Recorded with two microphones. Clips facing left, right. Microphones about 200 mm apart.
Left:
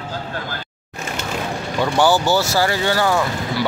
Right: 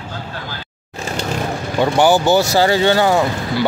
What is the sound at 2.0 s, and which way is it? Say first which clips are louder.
Speech: right 3 dB; 20° right (ahead or behind).